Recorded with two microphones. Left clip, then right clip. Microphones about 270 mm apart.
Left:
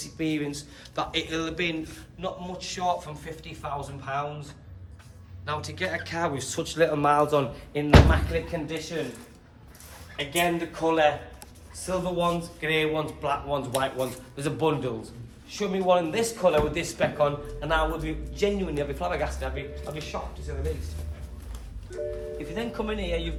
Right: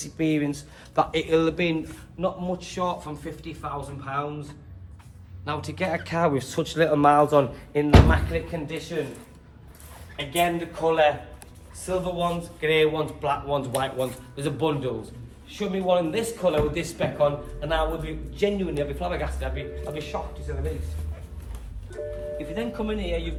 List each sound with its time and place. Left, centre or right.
0.0 s a man's voice: right; by 4.4 s centre
5.5 s speech: centre
10.3 s a man's voice: centre
22.0 s a man's voice: centre